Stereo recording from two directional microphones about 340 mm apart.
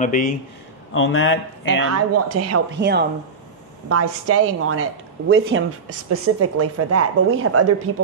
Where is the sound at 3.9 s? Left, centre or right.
Right.